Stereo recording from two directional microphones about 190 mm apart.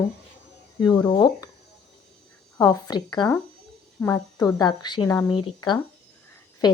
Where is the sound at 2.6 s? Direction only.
20° left (ahead or behind).